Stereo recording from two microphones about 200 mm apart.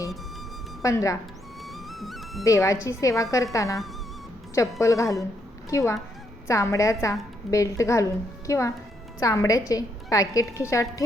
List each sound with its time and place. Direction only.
0.8 s a woman's voice: 15° left (ahead or behind)
1.6 s music: centre (ahead or behind)
2.4 s a woman's voice: 15° left (ahead or behind)
4.8 s a woman's voice: 15° left (ahead or behind)